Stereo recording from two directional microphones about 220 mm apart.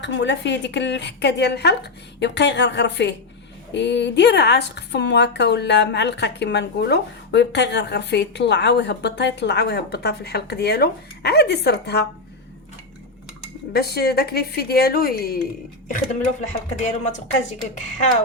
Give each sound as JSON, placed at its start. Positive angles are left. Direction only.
{"t": 0.0, "sound": "a woman's voice", "side_deg": 55}
{"t": 13.7, "sound": "a woman's voice", "side_deg": 45}
{"t": 16.4, "sound": "speech", "side_deg": 30}